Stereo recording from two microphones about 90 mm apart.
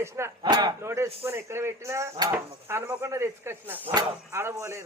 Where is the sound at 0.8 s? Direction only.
35° right (ahead or behind).